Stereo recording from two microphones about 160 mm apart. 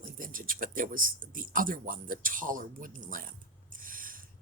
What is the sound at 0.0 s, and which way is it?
Speech, 60° right (ahead or behind).